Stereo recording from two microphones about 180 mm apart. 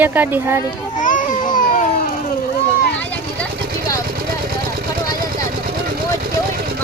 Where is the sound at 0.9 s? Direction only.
45° left (ahead or behind).